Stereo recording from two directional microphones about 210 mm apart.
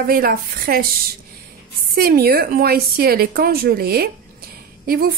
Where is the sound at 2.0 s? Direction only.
45° right (ahead or behind).